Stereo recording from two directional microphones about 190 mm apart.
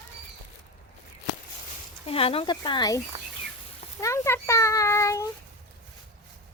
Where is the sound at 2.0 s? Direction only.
30° left (ahead or behind).